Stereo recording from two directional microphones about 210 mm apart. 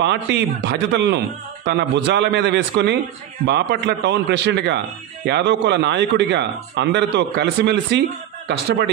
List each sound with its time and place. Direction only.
0.0 s a man's voice: 55° right (ahead or behind)